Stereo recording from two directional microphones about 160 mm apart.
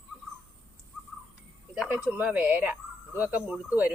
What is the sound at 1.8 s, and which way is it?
Speech, 10° right (ahead or behind).